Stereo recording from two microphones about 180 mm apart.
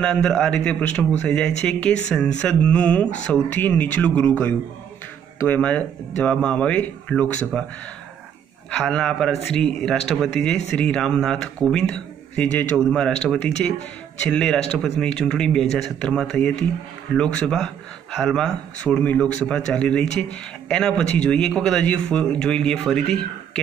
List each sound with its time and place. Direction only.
0.0 s a man's voice: 5° left (ahead or behind)
8.6 s a man's voice: 5° left (ahead or behind)